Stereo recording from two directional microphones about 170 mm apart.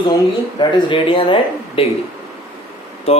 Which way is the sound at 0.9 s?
30° left (ahead or behind).